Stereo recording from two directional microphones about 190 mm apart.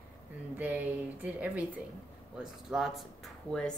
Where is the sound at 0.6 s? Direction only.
10° right (ahead or behind).